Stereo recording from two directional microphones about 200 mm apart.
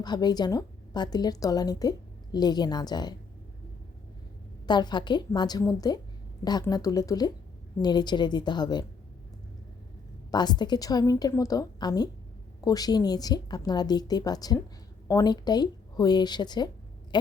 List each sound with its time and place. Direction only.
0.0 s a woman's voice: 20° left (ahead or behind)
4.6 s a woman's voice: 20° left (ahead or behind)
10.3 s a woman's voice: 20° left (ahead or behind)